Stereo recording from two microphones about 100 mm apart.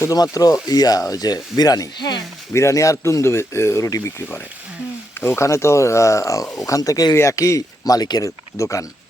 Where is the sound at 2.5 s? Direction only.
30° left (ahead or behind).